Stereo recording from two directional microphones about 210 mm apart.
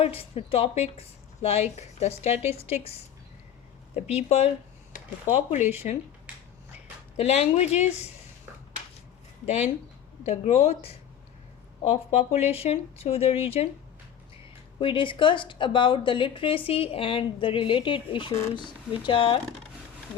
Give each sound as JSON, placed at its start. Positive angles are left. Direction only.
{"t": 0.0, "sound": "a woman's voice", "side_deg": 30}
{"t": 4.1, "sound": "speech", "side_deg": 30}
{"t": 7.2, "sound": "speech", "side_deg": 30}
{"t": 10.2, "sound": "a woman's voice", "side_deg": 30}
{"t": 11.8, "sound": "a woman's voice", "side_deg": 30}
{"t": 14.8, "sound": "a woman's voice", "side_deg": 25}